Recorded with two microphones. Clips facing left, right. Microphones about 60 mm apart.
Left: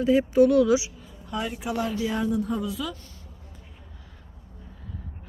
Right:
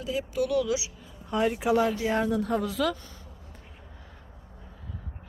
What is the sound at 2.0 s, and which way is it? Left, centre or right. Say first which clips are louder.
Speech: even; right.